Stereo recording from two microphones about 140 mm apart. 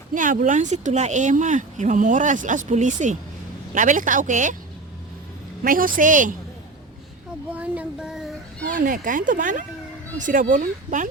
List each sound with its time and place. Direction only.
0.1 s speech: 70° right (ahead or behind)
5.6 s speech: 80° right
7.5 s a sound: 10° right (ahead or behind)
8.6 s speech: 75° right (ahead or behind)